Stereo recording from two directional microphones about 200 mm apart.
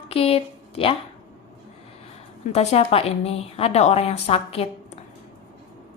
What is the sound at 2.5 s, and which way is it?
A woman's voice, 30° left (ahead or behind).